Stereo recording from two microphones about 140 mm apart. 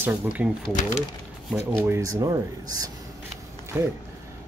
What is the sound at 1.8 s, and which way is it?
Speech, 20° right (ahead or behind).